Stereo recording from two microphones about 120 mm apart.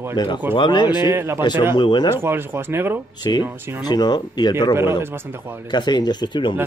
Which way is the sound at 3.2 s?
35° left (ahead or behind).